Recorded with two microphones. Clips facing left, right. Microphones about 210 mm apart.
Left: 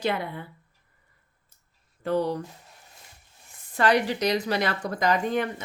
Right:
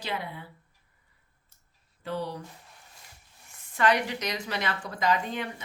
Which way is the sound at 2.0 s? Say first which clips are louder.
Left 8 dB; 45° left (ahead or behind).